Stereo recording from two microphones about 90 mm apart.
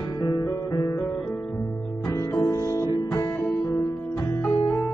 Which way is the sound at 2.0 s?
35° left (ahead or behind).